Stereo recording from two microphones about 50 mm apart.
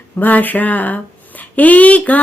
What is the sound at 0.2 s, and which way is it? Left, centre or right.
Speech, left.